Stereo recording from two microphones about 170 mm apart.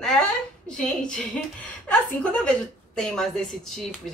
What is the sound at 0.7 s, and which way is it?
Speech, 5° left (ahead or behind).